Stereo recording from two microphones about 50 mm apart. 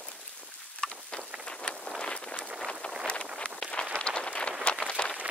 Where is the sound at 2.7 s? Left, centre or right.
Centre.